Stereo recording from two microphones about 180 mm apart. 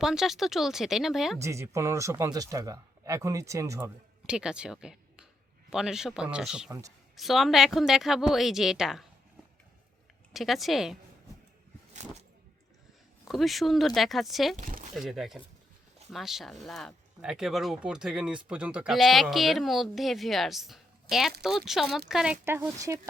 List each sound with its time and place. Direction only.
0.0 s speech: 5° right (ahead or behind)
1.4 s speech: 15° right (ahead or behind)
6.7 s speech: 20° right (ahead or behind)
7.2 s speech: centre (ahead or behind)
10.3 s speech: centre (ahead or behind)
13.2 s speech: centre (ahead or behind)
14.6 s speech: 50° right (ahead or behind)
14.9 s speech: centre (ahead or behind)